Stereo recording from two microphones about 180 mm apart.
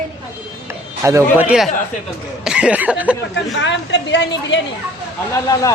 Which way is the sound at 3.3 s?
80° left.